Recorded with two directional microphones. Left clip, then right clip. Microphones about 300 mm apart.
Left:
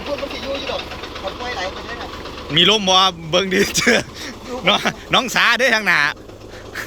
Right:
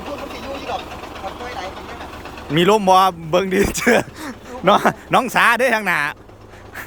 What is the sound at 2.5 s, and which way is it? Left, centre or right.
A man's voice, centre.